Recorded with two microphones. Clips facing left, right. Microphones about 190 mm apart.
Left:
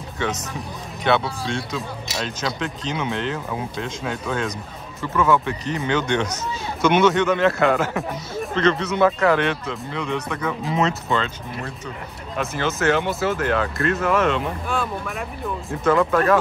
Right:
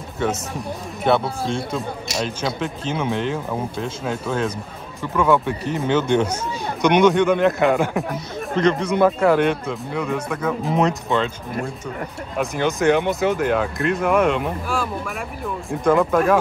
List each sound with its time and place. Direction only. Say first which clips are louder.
1.2 s speech: right 3 dB; 50° right (ahead or behind)
1.8 s speech: right 3 dB; centre (ahead or behind)
12.4 s speech: right 3 dB; 15° right (ahead or behind)
14.7 s speech: right 1 dB; centre (ahead or behind)
15.7 s speech: right 2 dB; 15° right (ahead or behind)